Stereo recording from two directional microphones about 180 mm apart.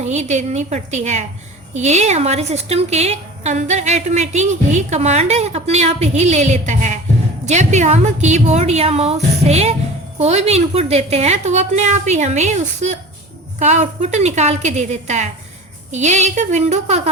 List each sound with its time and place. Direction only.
0.0 s a woman's voice: 40° right (ahead or behind)